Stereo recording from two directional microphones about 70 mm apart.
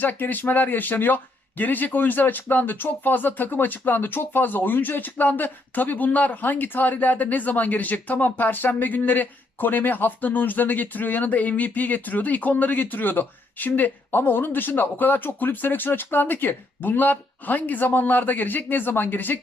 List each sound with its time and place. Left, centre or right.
0.0 s speech: left